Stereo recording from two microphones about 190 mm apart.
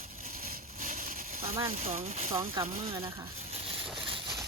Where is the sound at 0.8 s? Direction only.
45° right (ahead or behind).